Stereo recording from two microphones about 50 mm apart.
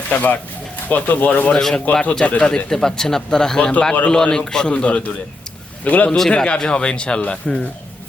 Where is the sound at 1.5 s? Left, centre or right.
Centre.